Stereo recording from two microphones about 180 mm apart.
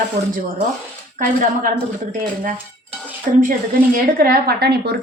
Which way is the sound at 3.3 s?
45° right (ahead or behind).